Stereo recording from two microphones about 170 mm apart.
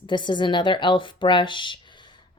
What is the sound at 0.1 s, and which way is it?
Speech, 25° left (ahead or behind).